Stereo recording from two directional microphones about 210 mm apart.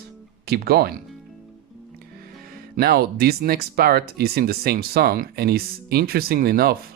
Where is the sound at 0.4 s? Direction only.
50° right (ahead or behind).